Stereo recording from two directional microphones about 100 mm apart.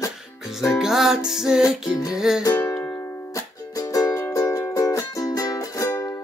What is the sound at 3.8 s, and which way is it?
Music, 40° left (ahead or behind).